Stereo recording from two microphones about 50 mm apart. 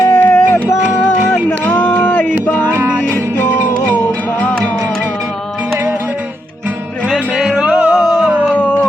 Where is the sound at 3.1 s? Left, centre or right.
Left.